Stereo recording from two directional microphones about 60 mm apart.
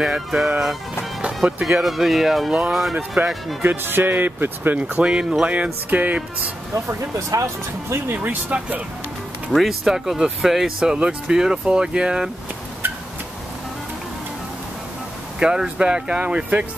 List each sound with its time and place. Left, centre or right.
0.0 s speech: centre
3.6 s speech: right
4.7 s speech: right
5.4 s music: right
6.7 s speech: right
7.9 s speech: right
9.5 s speech: centre
15.3 s speech: centre